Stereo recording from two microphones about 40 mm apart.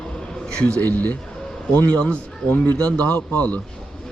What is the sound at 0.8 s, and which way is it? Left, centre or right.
Speech, left.